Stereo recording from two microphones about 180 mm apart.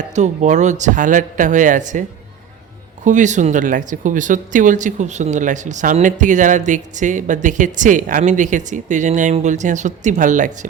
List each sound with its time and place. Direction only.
0.1 s speech: 40° right (ahead or behind)